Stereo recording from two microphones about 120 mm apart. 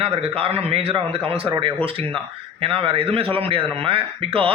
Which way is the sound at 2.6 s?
50° right (ahead or behind).